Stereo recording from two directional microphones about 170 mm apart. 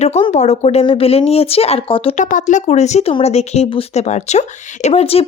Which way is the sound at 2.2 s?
50° left (ahead or behind).